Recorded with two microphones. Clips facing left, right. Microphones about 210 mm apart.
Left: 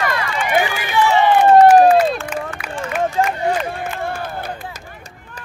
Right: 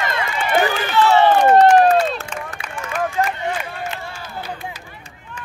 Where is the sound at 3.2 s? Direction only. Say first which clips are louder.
Left 5 dB; 40° left (ahead or behind).